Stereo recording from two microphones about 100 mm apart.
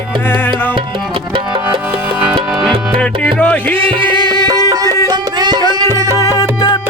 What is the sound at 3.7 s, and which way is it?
Music, 60° right (ahead or behind).